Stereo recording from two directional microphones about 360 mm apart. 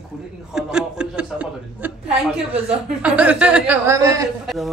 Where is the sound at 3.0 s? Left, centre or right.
Centre.